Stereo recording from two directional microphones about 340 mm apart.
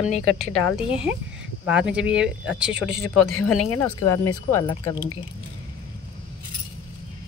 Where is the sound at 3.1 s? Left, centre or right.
Left.